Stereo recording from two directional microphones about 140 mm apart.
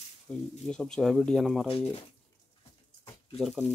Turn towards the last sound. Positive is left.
turn(degrees=5)  # may be behind; listen again after turning